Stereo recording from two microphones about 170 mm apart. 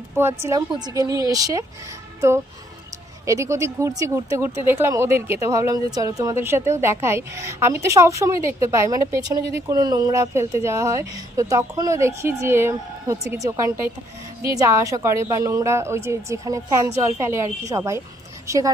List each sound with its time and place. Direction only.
0.1 s speech: 15° right (ahead or behind)
3.3 s speech: 20° right (ahead or behind)